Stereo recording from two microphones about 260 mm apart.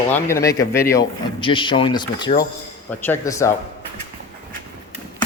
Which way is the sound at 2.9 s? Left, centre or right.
Centre.